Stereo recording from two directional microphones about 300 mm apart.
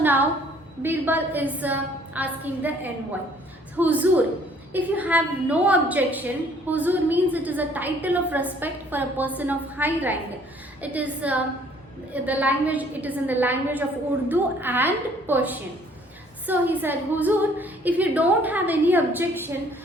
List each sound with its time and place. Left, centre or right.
0.0 s a woman's voice: centre